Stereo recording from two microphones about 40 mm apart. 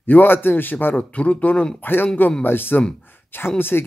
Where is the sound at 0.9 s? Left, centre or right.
Left.